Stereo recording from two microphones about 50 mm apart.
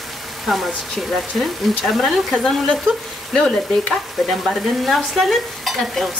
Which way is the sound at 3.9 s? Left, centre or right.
Centre.